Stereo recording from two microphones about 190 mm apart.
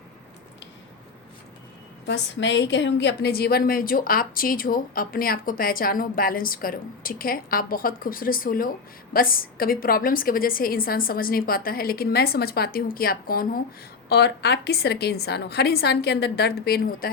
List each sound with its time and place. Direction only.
2.0 s a woman's voice: 70° left (ahead or behind); by 13.6 s 50° left (ahead or behind)
14.1 s a woman's voice: 60° left (ahead or behind)